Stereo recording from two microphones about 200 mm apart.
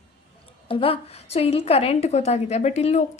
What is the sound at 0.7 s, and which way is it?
A woman's voice, 30° left (ahead or behind).